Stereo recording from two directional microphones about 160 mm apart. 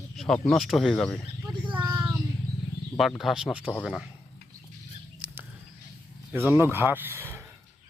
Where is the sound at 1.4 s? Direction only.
30° right (ahead or behind).